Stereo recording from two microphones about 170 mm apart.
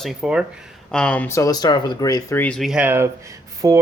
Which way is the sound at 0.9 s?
5° left (ahead or behind).